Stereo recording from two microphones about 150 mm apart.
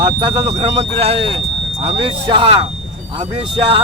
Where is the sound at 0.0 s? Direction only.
35° right (ahead or behind).